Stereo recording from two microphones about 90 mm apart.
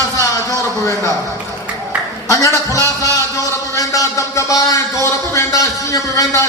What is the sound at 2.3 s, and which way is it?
A man's voice, 40° left (ahead or behind).